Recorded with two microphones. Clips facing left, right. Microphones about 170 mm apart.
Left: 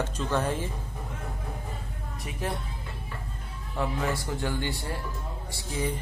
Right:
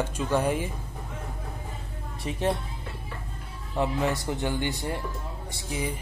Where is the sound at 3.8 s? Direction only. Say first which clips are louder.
Right 3 dB; 20° right (ahead or behind).